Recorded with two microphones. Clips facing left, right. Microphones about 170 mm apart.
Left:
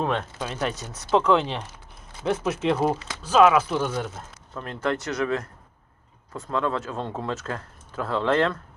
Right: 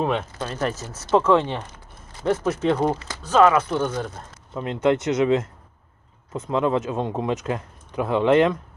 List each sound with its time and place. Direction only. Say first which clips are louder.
0.0 s speech: right 2 dB; 5° right (ahead or behind)
0.3 s speech: right 2 dB; 5° left (ahead or behind)
4.5 s speech: right 7 dB; 20° right (ahead or behind)